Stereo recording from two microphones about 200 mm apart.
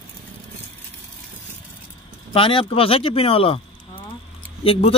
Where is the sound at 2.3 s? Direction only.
25° left (ahead or behind).